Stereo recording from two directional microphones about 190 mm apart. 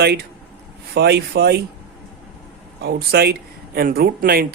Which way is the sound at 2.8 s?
55° right (ahead or behind).